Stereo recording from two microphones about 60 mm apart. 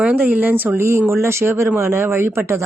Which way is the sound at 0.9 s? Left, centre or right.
Right.